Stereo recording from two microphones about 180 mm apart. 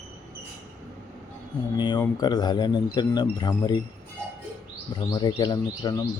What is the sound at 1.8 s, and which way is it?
A man's voice, 25° left (ahead or behind).